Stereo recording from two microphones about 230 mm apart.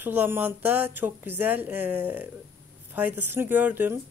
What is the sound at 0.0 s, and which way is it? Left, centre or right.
A woman's voice, centre.